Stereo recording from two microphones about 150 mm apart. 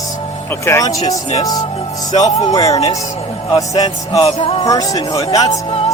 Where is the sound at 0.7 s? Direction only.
20° left (ahead or behind).